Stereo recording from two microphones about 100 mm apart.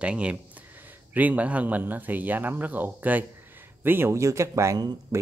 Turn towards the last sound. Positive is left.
turn(degrees=-35)  # may be behind; listen again after turning